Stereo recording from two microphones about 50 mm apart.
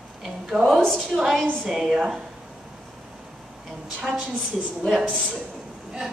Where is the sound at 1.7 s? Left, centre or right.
Centre.